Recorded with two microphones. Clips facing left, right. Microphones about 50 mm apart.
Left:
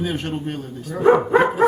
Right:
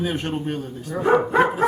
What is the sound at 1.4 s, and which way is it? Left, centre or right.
Dog, centre.